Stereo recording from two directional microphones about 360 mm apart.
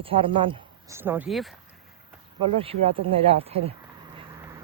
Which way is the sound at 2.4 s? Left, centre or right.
Centre.